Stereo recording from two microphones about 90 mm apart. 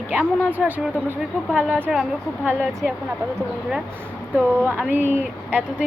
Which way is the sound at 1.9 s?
5° right (ahead or behind).